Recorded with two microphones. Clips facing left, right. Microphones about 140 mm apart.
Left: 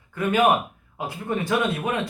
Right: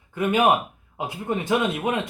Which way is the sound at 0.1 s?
20° right (ahead or behind).